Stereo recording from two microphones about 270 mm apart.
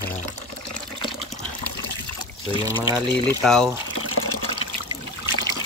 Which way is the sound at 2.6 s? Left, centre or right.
Centre.